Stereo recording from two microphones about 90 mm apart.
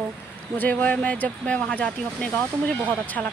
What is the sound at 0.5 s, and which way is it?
A woman's voice, 20° left (ahead or behind).